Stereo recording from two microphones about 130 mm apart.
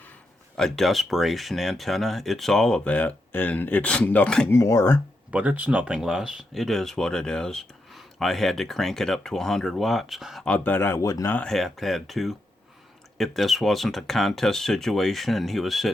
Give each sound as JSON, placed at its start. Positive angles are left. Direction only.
{"t": 0.5, "sound": "speech", "side_deg": 0}
{"t": 4.5, "sound": "speech", "side_deg": 20}
{"t": 5.3, "sound": "speech", "side_deg": -10}
{"t": 10.4, "sound": "speech", "side_deg": 10}
{"t": 11.3, "sound": "speech", "side_deg": 5}